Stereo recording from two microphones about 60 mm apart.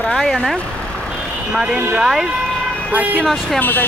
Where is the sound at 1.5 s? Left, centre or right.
Centre.